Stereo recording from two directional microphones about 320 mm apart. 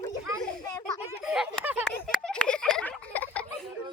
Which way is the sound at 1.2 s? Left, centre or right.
Centre.